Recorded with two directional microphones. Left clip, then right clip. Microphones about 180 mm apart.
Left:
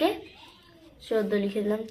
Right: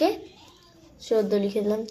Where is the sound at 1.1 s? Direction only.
50° right (ahead or behind).